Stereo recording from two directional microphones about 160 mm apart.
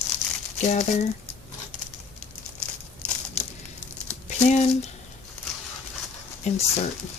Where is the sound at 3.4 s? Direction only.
45° left (ahead or behind).